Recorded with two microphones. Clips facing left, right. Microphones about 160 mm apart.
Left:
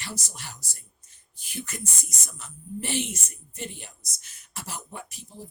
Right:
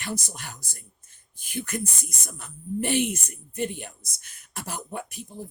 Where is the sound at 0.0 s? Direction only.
55° right (ahead or behind).